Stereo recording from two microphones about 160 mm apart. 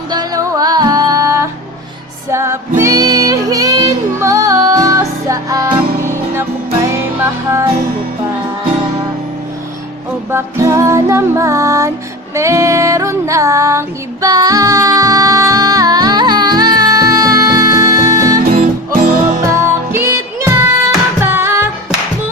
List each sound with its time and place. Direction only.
0.1 s music: 25° right (ahead or behind)
10.3 s music: 20° right (ahead or behind)
18.6 s music: 60° right (ahead or behind)
19.5 s music: 15° right (ahead or behind)